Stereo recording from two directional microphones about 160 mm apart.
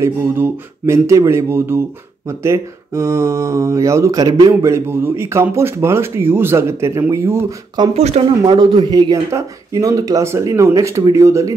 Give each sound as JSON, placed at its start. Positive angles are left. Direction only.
{"t": 0.0, "sound": "speech", "side_deg": -15}
{"t": 7.9, "sound": "speech", "side_deg": -40}